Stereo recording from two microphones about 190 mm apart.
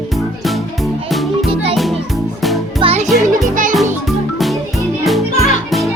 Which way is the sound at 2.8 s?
30° right (ahead or behind).